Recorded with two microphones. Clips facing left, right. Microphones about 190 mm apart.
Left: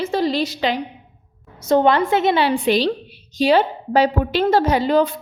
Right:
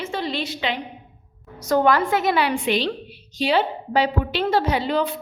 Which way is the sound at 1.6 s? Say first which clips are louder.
Left 3 dB; 25° left (ahead or behind).